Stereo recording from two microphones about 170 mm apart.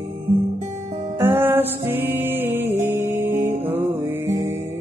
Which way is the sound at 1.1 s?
15° right (ahead or behind).